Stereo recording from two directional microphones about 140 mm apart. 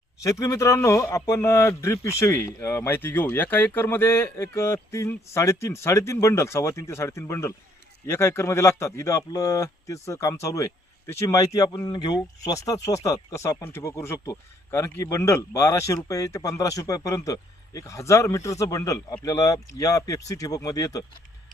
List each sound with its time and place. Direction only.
0.2 s speech: 25° left (ahead or behind)